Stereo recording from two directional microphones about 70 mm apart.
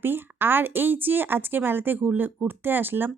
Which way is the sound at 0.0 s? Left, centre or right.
Right.